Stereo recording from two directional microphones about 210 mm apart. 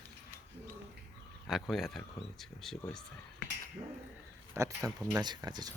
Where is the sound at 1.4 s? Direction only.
Centre (ahead or behind).